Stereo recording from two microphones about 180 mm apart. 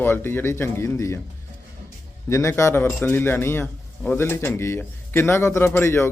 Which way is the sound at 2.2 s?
15° left (ahead or behind).